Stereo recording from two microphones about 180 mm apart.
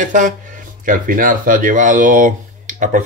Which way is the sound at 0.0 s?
45° right (ahead or behind).